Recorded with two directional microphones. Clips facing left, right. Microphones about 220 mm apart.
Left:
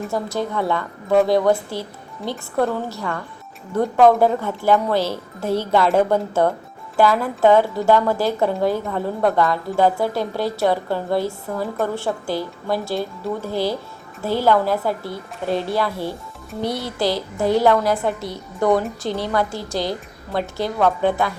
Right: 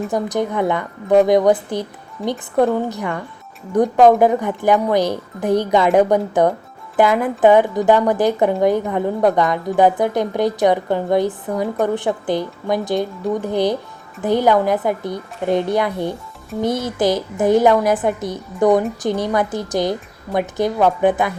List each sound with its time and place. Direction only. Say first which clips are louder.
0.1 s a woman's voice: right 3 dB; 15° right (ahead or behind)